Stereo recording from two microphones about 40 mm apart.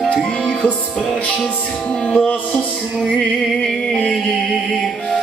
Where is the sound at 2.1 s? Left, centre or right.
Left.